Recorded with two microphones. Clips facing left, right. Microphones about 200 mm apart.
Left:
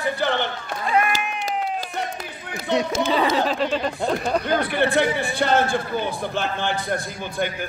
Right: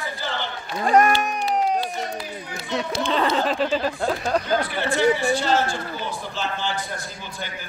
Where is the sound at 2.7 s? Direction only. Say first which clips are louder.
Left 5 dB; 65° left (ahead or behind).